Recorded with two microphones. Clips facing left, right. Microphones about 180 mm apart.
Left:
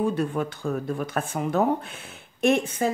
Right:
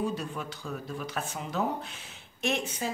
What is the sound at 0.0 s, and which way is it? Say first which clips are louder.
Speech: left 8 dB; 55° left (ahead or behind).